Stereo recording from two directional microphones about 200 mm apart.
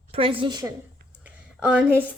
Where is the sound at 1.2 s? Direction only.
5° right (ahead or behind).